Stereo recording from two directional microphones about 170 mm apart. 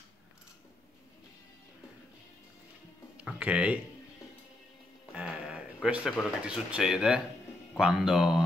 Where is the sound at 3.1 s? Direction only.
5° right (ahead or behind).